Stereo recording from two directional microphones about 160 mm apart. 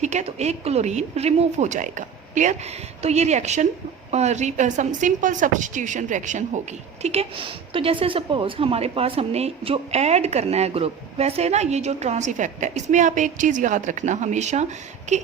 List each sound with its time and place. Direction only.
0.0 s a woman's voice: 45° right (ahead or behind)
7.0 s a woman's voice: 40° right (ahead or behind)